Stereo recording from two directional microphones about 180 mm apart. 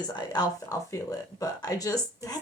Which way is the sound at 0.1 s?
20° left (ahead or behind).